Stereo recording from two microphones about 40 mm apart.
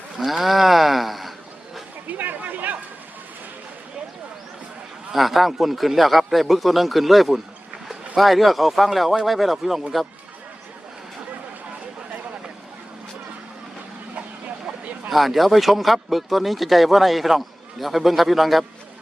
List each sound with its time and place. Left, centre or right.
0.2 s speech: centre
2.0 s a sound: right
5.1 s speech: centre
14.2 s vehicle: right
15.1 s speech: centre